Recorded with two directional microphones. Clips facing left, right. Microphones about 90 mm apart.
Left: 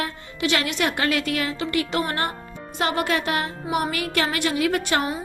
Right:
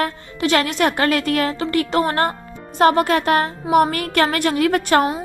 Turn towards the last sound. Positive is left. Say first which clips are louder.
# right 6 dB
turn(degrees=-50)  # may be behind; listen again after turning